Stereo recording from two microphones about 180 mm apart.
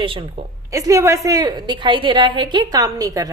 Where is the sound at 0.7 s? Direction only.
15° right (ahead or behind).